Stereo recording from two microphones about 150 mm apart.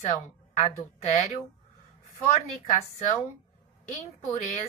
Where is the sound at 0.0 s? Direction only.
50° left (ahead or behind).